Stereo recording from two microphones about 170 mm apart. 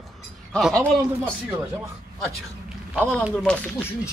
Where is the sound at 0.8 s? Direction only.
15° right (ahead or behind).